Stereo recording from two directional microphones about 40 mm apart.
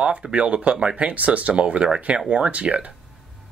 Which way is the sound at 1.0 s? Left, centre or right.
Right.